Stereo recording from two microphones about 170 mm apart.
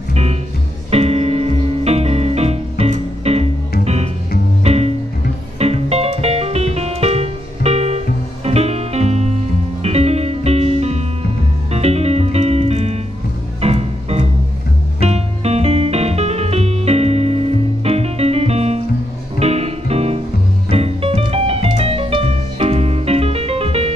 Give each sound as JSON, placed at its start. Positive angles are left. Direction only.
{"t": 0.1, "sound": "music", "side_deg": -40}